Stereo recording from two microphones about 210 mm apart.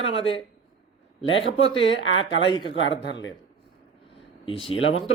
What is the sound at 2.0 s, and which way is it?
Speech, 65° left (ahead or behind).